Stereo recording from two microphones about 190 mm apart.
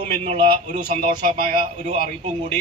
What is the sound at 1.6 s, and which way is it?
Speech, 40° right (ahead or behind).